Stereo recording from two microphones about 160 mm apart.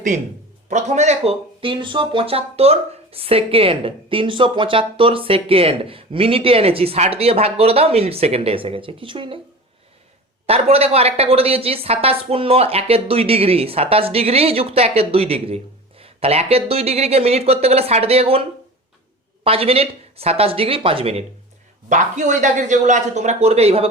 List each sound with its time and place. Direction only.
0.7 s speech: 45° right (ahead or behind)
10.4 s speech: 40° right (ahead or behind)
19.5 s speech: 40° right (ahead or behind)
21.8 s speech: 50° right (ahead or behind)